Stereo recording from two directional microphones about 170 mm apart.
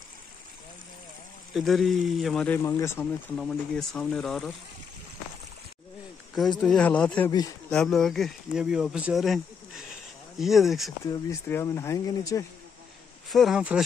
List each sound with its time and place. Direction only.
1.5 s speech: centre (ahead or behind)
3.3 s speech: centre (ahead or behind)
6.6 s speech: 5° left (ahead or behind)
11.1 s speech: 15° left (ahead or behind)
13.3 s speech: centre (ahead or behind)